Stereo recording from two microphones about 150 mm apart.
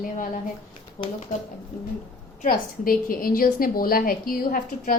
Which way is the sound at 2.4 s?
75° left (ahead or behind).